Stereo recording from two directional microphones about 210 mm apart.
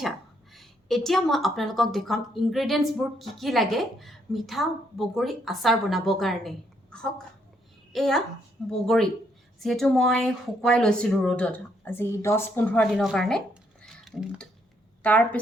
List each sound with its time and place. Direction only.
0.5 s a woman's voice: centre (ahead or behind)
9.6 s a woman's voice: centre (ahead or behind)